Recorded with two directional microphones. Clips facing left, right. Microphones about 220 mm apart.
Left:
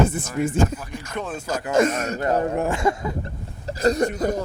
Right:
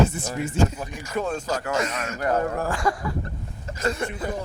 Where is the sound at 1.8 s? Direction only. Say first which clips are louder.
Left 8 dB; 50° left (ahead or behind).